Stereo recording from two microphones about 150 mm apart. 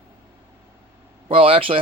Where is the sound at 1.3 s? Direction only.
40° right (ahead or behind).